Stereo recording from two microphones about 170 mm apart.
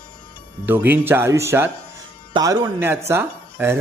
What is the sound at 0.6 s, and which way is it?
Speech, 10° right (ahead or behind).